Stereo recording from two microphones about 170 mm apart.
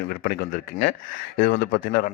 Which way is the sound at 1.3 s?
75° left (ahead or behind).